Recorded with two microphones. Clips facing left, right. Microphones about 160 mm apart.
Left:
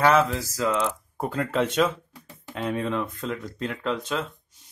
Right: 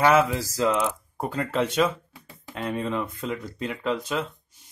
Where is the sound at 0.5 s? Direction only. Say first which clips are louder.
Right 2 dB; 25° right (ahead or behind).